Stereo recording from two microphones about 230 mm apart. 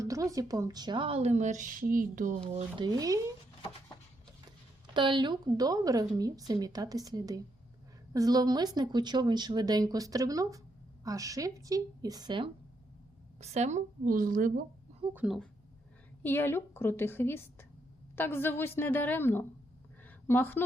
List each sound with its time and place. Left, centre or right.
0.0 s a woman's voice: centre
2.8 s speech: centre
4.9 s speech: right
13.4 s a woman's voice: right
15.1 s speech: centre
16.2 s a woman's voice: centre
20.1 s a sound: centre